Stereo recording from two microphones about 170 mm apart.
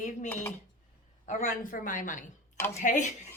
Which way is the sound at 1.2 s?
50° left (ahead or behind).